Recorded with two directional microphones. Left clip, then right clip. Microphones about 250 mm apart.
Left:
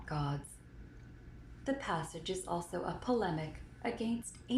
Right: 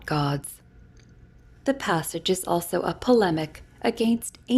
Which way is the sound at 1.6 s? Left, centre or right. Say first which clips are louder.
Right 12 dB; right.